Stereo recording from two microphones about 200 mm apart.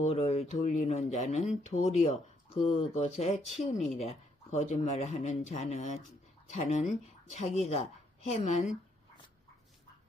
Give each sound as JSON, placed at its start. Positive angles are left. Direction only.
{"t": 0.0, "sound": "speech", "side_deg": 30}